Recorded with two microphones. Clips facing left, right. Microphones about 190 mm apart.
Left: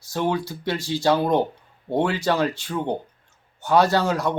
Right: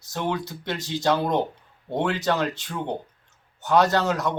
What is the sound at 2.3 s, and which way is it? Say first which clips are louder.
Speech: left 3 dB; 10° left (ahead or behind).